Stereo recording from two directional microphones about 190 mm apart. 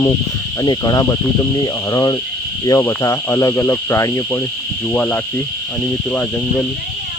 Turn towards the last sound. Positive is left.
turn(degrees=10)  # may be behind; listen again after turning